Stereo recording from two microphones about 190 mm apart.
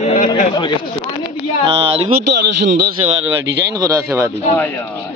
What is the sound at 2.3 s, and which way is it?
Speech, 65° right (ahead or behind).